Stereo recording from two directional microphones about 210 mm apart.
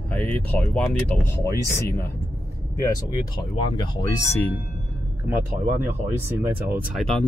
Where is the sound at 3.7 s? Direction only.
20° left (ahead or behind).